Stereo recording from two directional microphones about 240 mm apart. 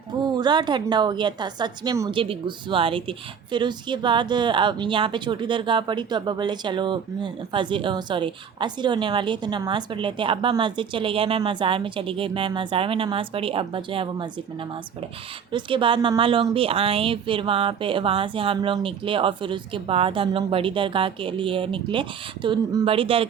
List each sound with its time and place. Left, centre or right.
0.3 s a woman's voice: centre
15.5 s a woman's voice: right